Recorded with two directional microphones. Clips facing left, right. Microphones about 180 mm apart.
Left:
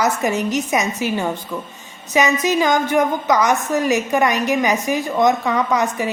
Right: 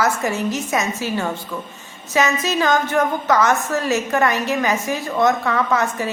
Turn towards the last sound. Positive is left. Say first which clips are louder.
# left 1 dB
turn(degrees=15)  # may be behind; listen again after turning